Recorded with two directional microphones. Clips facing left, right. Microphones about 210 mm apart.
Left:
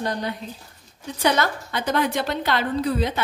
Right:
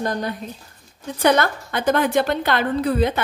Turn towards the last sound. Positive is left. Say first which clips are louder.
# right 3 dB
turn(degrees=-55)  # may be behind; listen again after turning